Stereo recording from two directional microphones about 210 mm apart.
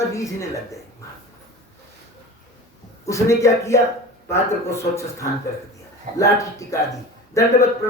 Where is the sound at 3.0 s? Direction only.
15° left (ahead or behind).